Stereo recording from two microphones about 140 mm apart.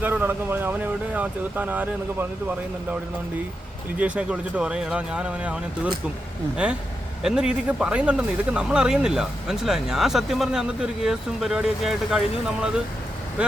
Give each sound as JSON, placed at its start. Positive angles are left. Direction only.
{"t": 0.0, "sound": "speech", "side_deg": -15}
{"t": 3.9, "sound": "speech", "side_deg": -10}
{"t": 7.2, "sound": "speech", "side_deg": -5}